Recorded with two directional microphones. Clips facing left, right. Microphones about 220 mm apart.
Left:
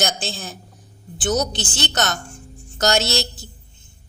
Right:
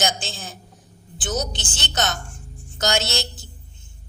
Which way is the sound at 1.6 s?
40° left (ahead or behind).